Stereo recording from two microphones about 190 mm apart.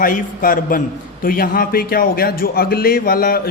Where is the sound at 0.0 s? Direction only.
45° left (ahead or behind).